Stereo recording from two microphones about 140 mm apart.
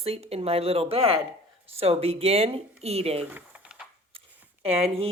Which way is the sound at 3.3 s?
10° right (ahead or behind).